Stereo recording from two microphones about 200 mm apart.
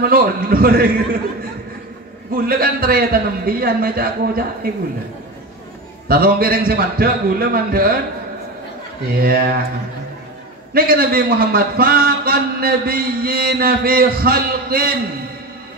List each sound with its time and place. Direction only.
0.0 s a man's voice: 50° right (ahead or behind)
2.3 s a man's voice: 50° right (ahead or behind)
6.0 s a man's voice: 50° right (ahead or behind)
9.2 s a man's voice: 50° right (ahead or behind)
10.7 s a man's voice: 50° right (ahead or behind)